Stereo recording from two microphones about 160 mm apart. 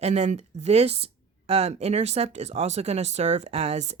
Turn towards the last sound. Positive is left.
turn(degrees=-45)  # may be behind; listen again after turning